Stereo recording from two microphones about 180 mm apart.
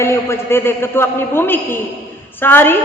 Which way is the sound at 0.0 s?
15° left (ahead or behind).